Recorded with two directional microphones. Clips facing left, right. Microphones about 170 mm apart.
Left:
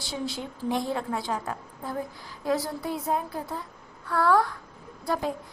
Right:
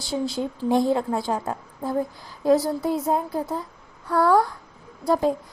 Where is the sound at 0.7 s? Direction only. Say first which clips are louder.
Right 7 dB; 30° right (ahead or behind).